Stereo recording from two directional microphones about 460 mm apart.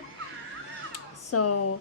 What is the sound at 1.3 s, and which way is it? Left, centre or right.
Speech, left.